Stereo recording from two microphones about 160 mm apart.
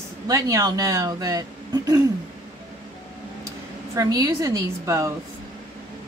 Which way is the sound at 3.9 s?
20° right (ahead or behind).